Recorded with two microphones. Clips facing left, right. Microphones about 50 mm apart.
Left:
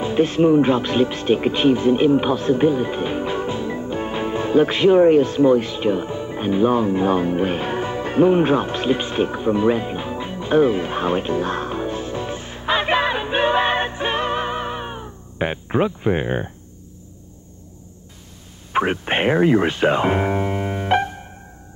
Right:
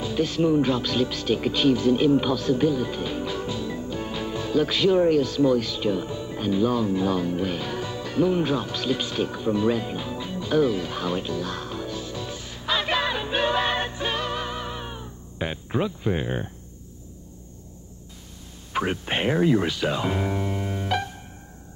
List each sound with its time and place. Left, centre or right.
0.0 s music: left
18.7 s speech: left